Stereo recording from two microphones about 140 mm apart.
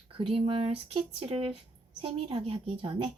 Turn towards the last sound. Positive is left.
turn(degrees=-40)  # may be behind; listen again after turning